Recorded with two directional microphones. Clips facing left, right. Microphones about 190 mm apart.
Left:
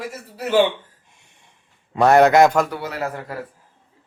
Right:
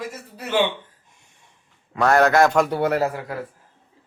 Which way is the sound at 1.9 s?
20° left (ahead or behind).